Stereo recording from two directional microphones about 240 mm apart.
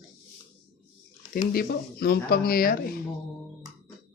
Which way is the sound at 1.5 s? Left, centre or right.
Left.